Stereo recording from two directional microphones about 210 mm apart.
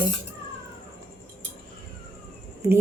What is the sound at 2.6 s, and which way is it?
Speech, 15° right (ahead or behind).